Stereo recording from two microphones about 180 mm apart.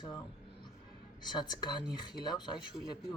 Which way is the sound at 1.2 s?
25° left (ahead or behind).